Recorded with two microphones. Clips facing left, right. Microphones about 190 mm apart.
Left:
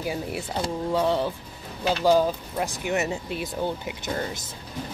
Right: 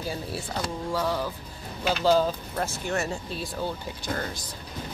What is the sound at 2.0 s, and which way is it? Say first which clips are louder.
Speech: left 2 dB; 10° left (ahead or behind).